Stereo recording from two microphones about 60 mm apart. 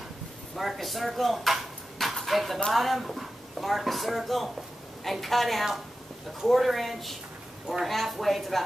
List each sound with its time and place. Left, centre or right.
0.6 s speech: centre